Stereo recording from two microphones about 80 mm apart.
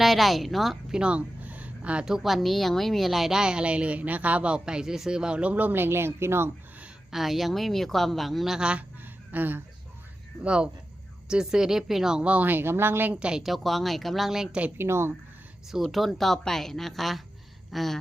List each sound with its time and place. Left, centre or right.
0.0 s a woman's voice: centre; by 6.5 s right
7.1 s speech: centre
9.3 s a woman's voice: right
13.1 s speech: centre
14.8 s speech: right
15.7 s speech: centre
17.7 s a sound: centre